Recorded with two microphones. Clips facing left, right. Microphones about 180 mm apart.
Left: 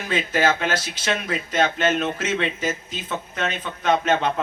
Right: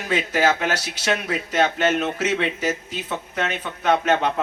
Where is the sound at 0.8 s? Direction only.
70° right (ahead or behind).